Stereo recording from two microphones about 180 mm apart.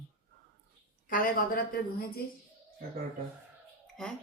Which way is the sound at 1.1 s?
50° left (ahead or behind).